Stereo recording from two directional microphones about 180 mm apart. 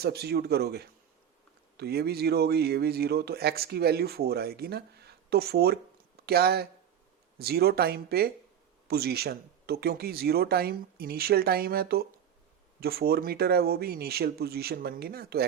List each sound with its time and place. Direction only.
0.0 s a man's voice: 60° right (ahead or behind)